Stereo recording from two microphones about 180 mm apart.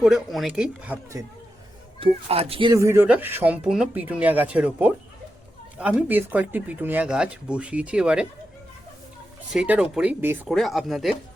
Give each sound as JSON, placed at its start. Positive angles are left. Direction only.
{"t": 0.0, "sound": "speech", "side_deg": 0}
{"t": 2.0, "sound": "speech", "side_deg": -35}
{"t": 2.7, "sound": "speech", "side_deg": -15}
{"t": 6.0, "sound": "speech", "side_deg": -10}
{"t": 9.5, "sound": "speech", "side_deg": -5}
{"t": 10.5, "sound": "speech", "side_deg": 0}